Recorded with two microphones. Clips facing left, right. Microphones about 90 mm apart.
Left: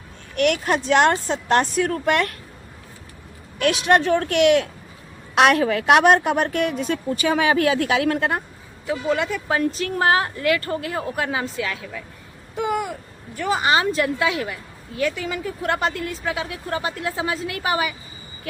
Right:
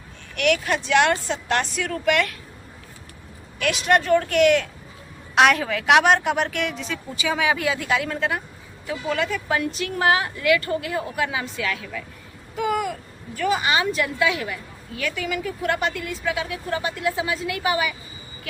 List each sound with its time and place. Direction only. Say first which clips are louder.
0.3 s a woman's voice: left 2 dB; 40° left (ahead or behind)
3.6 s a woman's voice: left 3 dB; 50° left (ahead or behind)
5.4 s a woman's voice: left 2 dB; 55° left (ahead or behind)
5.8 s a woman's voice: left 1 dB; 40° left (ahead or behind); by 8.3 s 75° left (ahead or behind)
8.9 s speech: left 2 dB; 25° left (ahead or behind)